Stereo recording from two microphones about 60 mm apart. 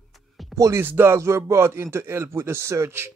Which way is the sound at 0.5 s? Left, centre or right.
Right.